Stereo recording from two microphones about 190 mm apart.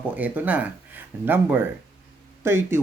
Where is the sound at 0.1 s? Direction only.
10° right (ahead or behind).